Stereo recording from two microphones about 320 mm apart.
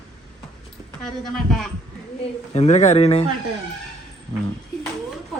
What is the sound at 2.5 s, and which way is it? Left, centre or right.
Speech, left.